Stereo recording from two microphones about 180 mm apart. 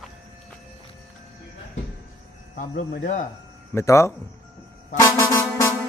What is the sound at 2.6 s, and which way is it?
Speech, 45° left (ahead or behind).